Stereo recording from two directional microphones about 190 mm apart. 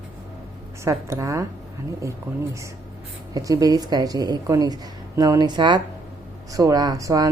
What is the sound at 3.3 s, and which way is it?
Speech, 20° right (ahead or behind).